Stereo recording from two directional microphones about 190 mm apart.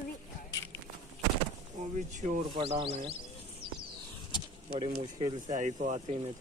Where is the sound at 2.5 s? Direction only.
25° right (ahead or behind).